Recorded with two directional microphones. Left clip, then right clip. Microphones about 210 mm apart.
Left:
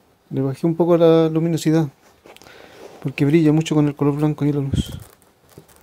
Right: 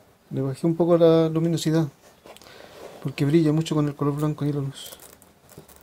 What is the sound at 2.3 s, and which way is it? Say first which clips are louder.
Walk: left 3 dB; 25° left (ahead or behind).